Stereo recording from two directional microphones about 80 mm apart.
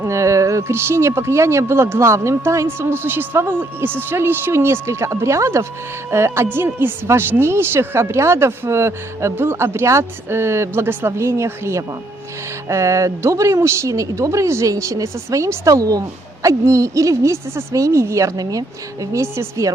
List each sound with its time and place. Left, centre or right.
0.0 s speech: right